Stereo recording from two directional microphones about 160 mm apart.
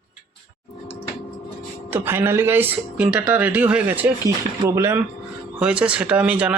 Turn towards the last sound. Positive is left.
turn(degrees=-10)  # may be behind; listen again after turning